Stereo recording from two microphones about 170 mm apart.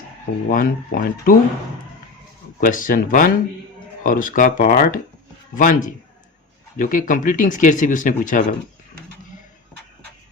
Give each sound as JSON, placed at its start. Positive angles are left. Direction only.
{"t": 0.5, "sound": "speech", "side_deg": 55}
{"t": 2.6, "sound": "speech", "side_deg": 50}